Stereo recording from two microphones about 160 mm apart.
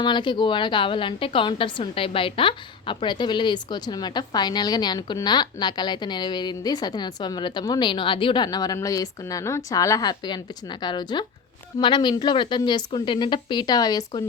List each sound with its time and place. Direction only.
0.0 s a woman's voice: 30° left (ahead or behind)